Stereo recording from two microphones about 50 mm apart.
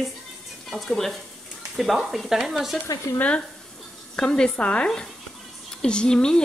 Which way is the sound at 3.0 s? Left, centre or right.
Left.